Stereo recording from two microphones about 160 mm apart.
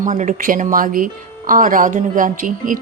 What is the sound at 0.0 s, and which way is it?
Speech, 55° right (ahead or behind).